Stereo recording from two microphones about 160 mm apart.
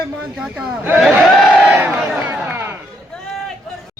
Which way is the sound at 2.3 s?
15° right (ahead or behind).